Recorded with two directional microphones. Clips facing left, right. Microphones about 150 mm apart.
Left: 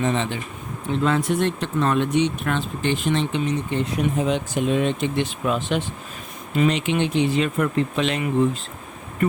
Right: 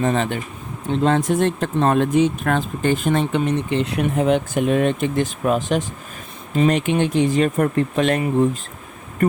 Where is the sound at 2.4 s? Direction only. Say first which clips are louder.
Right 4 dB; 45° right (ahead or behind).